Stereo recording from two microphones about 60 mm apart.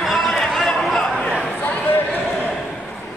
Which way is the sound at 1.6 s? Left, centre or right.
Left.